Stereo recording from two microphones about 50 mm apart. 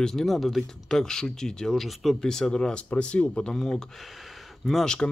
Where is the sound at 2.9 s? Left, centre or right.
Left.